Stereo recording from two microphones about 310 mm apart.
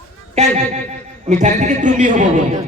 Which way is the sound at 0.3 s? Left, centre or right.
Right.